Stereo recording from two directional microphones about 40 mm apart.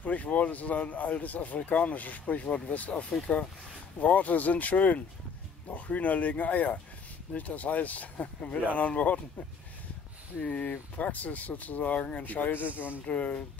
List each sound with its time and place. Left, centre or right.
0.0 s speech: left
4.0 s speech: left
11.0 s speech: left
13.0 s speech: left